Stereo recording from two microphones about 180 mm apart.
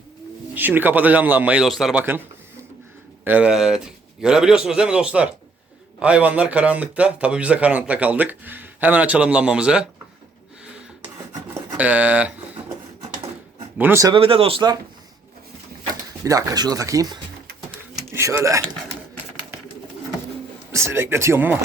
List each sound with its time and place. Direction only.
0.5 s a man's voice: 10° right (ahead or behind)
3.2 s a man's voice: 10° right (ahead or behind)
11.8 s speech: 10° right (ahead or behind)
13.7 s a man's voice: 15° right (ahead or behind)
14.1 s speech: 30° right (ahead or behind)
15.9 s speech: 20° right (ahead or behind)
17.9 s pigeon: 15° right (ahead or behind)
20.7 s a man's voice: 15° right (ahead or behind)